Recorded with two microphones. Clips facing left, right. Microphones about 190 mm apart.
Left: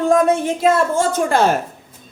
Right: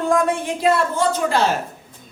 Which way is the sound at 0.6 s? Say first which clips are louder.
Left 1 dB; 50° left (ahead or behind).